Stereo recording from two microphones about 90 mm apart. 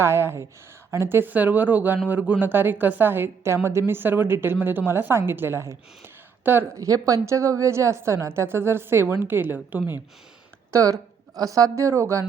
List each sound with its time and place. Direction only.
0.0 s a woman's voice: 30° right (ahead or behind)
6.7 s a woman's voice: 40° right (ahead or behind); by 9.8 s 20° right (ahead or behind)
10.7 s a woman's voice: 35° right (ahead or behind)